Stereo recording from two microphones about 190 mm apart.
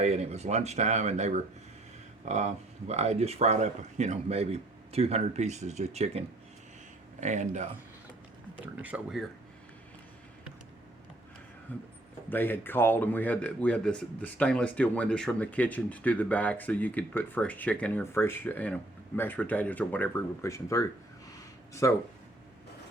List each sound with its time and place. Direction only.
0.0 s speech: 35° right (ahead or behind)
8.5 s speech: 10° right (ahead or behind)
11.7 s speech: 10° left (ahead or behind)